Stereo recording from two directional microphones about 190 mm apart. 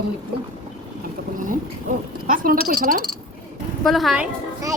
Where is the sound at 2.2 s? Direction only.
45° right (ahead or behind).